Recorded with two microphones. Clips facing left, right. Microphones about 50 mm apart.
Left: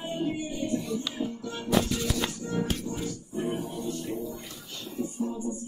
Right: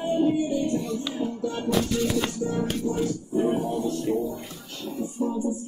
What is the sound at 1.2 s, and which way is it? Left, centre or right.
Music, right.